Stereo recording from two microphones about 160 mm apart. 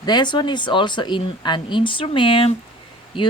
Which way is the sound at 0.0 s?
25° left (ahead or behind).